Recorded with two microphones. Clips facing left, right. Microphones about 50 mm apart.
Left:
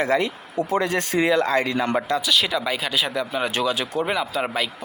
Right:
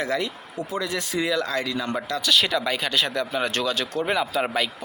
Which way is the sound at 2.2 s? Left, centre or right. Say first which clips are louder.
Even; centre.